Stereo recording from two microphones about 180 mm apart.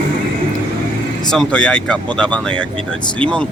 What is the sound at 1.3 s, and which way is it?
Speech, 5° left (ahead or behind).